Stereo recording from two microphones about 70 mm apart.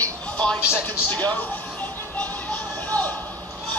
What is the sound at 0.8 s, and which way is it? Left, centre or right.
Music, left.